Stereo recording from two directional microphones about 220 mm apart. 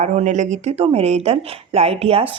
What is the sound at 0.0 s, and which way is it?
Speech, 30° right (ahead or behind).